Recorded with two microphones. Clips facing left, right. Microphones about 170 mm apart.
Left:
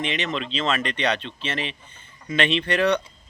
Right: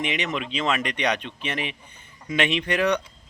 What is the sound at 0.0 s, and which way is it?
Speech, 15° right (ahead or behind).